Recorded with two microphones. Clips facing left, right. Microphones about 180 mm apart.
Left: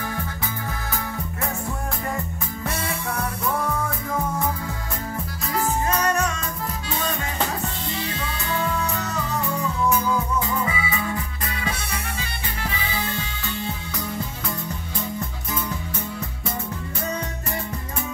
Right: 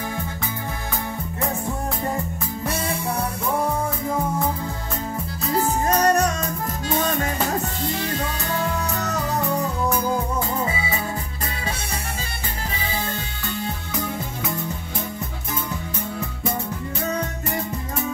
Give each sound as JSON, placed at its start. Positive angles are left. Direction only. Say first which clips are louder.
{"t": 5.5, "sound": "music", "louder": "right 3 dB", "side_deg": -35}